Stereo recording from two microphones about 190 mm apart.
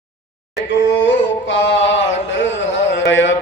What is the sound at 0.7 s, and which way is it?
Mantra, 65° left (ahead or behind).